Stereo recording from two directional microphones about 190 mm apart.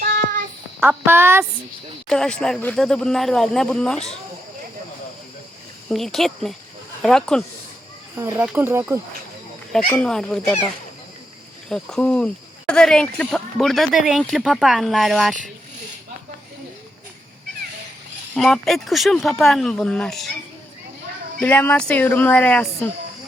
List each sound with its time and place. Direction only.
0.0 s child singing: 50° right (ahead or behind)
0.8 s speech: 10° right (ahead or behind)
2.0 s speech: 5° left (ahead or behind)
5.9 s speech: centre (ahead or behind)
8.1 s speech: 10° right (ahead or behind)
9.7 s speech: 5° left (ahead or behind)
11.7 s speech: 5° left (ahead or behind)
18.3 s speech: centre (ahead or behind)
21.4 s a woman's voice: 10° left (ahead or behind)